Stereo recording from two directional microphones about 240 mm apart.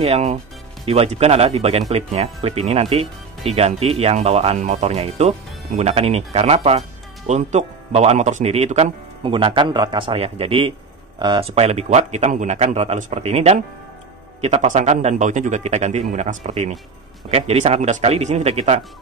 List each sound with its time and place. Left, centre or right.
0.0 s speech: right